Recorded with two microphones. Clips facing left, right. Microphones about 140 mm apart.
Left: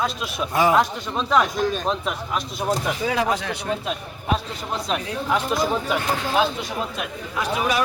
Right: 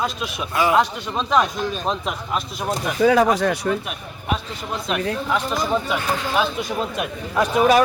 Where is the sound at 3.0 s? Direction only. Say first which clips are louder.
Right 7 dB; 45° right (ahead or behind).